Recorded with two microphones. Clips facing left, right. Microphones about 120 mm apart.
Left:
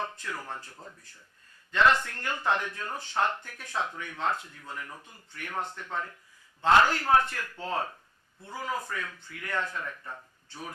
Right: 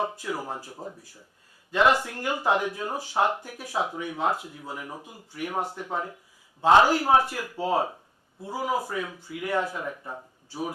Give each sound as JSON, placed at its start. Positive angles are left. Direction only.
{"t": 0.0, "sound": "speech", "side_deg": -10}